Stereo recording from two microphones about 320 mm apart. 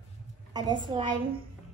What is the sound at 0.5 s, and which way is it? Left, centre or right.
Speech, centre.